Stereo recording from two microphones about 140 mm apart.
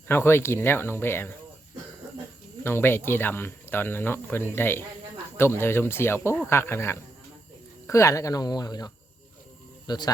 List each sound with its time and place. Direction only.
0.1 s speech: 15° left (ahead or behind)
2.6 s speech: 15° left (ahead or behind)